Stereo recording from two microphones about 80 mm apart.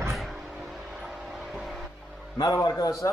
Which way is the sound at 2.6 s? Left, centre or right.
Left.